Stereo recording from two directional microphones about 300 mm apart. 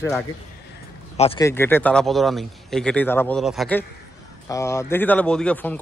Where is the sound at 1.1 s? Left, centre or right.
Centre.